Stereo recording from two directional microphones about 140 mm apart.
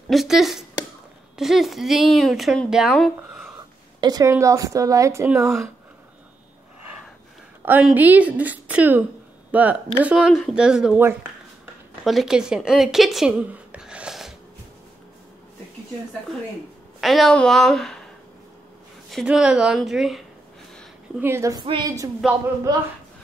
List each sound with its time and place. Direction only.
0.1 s speech: centre (ahead or behind)
4.0 s speech: 25° right (ahead or behind)
7.6 s speech: 10° right (ahead or behind)
12.0 s a woman's voice: centre (ahead or behind)
17.0 s speech: centre (ahead or behind)
19.0 s speech: centre (ahead or behind)
21.2 s speech: 20° right (ahead or behind)